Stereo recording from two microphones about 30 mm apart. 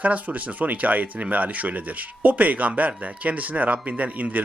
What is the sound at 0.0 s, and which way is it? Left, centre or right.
A man's voice, right.